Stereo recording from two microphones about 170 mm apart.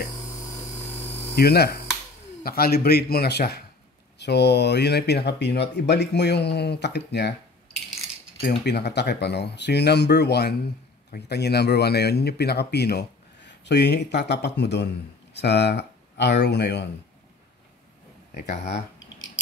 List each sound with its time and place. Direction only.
0.3 s helicopter: 15° left (ahead or behind)
1.3 s speech: 70° left (ahead or behind)
4.2 s speech: 80° left
8.4 s speech: 70° left (ahead or behind); by 16.8 s 85° left